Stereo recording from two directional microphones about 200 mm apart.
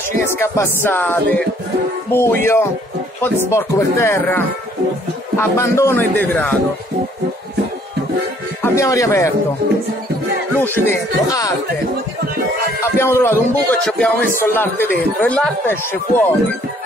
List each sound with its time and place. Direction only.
0.3 s speech: 10° left (ahead or behind)
5.4 s speech: 15° left (ahead or behind)
8.6 s speech: 15° left (ahead or behind)
10.5 s speech: 10° left (ahead or behind)
12.8 s speech: 10° left (ahead or behind)